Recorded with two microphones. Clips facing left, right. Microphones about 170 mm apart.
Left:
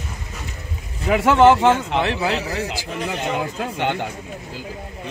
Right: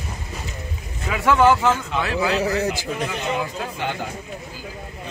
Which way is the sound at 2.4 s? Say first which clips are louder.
Right 4 dB; 45° right (ahead or behind).